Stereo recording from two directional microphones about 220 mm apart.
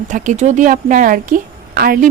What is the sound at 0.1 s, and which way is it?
A woman's voice, 35° right (ahead or behind).